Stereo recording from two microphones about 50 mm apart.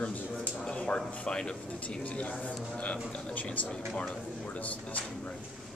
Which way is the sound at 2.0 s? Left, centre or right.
Left.